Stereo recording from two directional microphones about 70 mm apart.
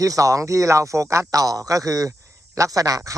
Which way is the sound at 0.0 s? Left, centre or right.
Right.